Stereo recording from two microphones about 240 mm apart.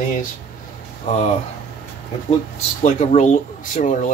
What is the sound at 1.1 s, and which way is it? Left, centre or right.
Speech, left.